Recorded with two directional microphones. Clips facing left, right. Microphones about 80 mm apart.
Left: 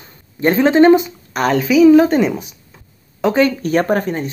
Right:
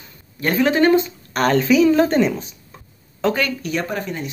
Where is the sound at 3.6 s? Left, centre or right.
Left.